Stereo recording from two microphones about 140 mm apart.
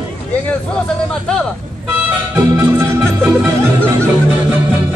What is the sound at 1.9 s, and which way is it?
Music, 15° right (ahead or behind).